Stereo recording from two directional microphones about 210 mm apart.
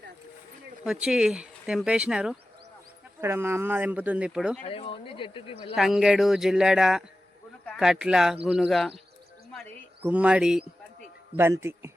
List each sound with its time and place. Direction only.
0.9 s speech: 5° right (ahead or behind)
4.6 s speech: 25° left (ahead or behind)
5.7 s speech: centre (ahead or behind)
10.0 s speech: 5° right (ahead or behind)